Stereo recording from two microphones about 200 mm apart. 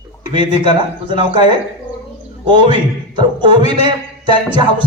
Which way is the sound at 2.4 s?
25° right (ahead or behind).